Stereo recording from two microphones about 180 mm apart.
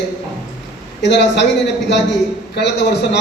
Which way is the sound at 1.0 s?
70° left (ahead or behind).